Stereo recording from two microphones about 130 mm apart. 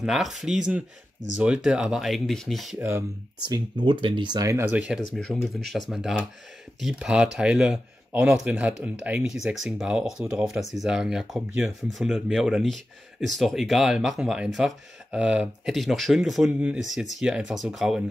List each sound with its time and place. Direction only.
0.0 s speech: centre (ahead or behind)
3.4 s speech: 35° right (ahead or behind)
4.7 s speech: 10° right (ahead or behind)